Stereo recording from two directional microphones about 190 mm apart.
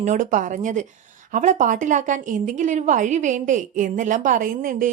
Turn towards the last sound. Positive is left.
turn(degrees=-45)  # may be behind; listen again after turning